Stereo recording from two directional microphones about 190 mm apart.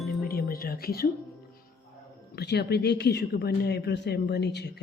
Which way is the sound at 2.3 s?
60° left (ahead or behind).